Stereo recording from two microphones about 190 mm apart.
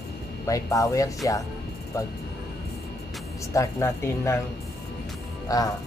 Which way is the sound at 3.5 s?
15° left (ahead or behind).